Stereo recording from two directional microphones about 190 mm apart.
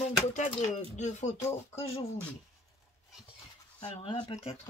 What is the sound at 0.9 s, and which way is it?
Speech, 40° left (ahead or behind).